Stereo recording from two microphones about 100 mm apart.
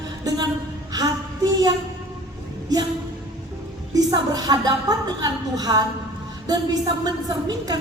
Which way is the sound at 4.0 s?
40° right (ahead or behind).